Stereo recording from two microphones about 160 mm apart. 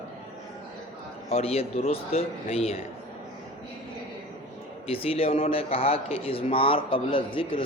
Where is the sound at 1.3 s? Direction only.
40° left (ahead or behind).